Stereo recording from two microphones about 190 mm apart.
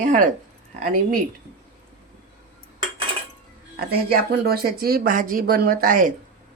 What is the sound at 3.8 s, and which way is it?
Speech, 50° right (ahead or behind).